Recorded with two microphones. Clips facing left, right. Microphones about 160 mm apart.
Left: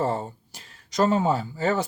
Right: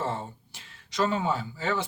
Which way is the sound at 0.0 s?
40° left (ahead or behind).